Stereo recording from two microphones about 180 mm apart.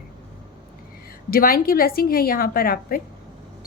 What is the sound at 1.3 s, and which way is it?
A woman's voice, 55° left (ahead or behind).